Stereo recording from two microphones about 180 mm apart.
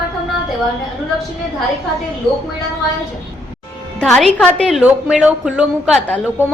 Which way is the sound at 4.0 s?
Centre (ahead or behind).